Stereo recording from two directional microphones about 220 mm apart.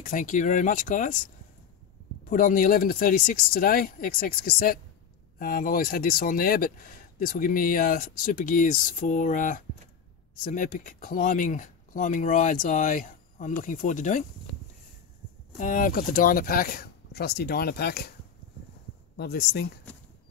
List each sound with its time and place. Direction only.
0.0 s speech: 35° left (ahead or behind)
15.5 s speech: 35° left (ahead or behind)
19.1 s speech: 50° left (ahead or behind)